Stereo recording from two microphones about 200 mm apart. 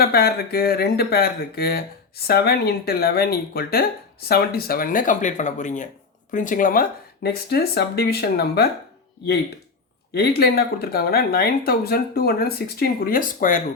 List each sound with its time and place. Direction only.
0.0 s speech: 50° left (ahead or behind)
10.2 s speech: 50° left (ahead or behind)